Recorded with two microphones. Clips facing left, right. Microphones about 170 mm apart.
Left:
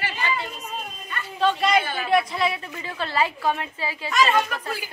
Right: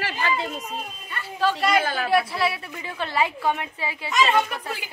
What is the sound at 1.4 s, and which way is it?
Speech, 5° right (ahead or behind).